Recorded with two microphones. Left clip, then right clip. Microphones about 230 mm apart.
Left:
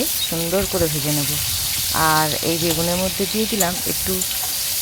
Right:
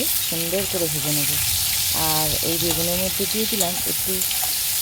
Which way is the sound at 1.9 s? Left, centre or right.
Centre.